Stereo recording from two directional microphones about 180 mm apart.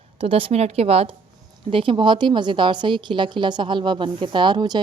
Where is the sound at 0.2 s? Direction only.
30° right (ahead or behind).